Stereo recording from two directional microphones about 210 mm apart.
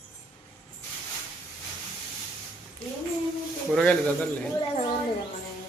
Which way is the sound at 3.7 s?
5° left (ahead or behind).